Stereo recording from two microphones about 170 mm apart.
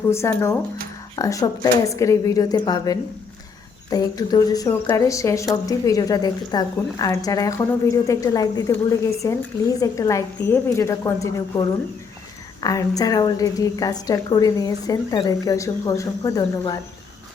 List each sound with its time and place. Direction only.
0.1 s a woman's voice: 15° left (ahead or behind)